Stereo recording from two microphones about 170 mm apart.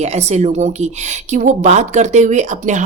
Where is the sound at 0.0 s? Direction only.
40° right (ahead or behind).